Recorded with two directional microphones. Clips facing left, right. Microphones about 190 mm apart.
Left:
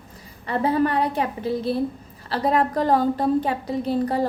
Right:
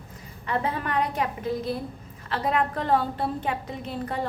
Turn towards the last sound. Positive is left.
turn(degrees=35)  # may be behind; listen again after turning